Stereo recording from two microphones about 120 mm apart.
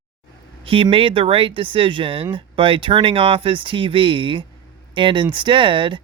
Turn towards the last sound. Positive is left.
turn(degrees=-45)  # may be behind; listen again after turning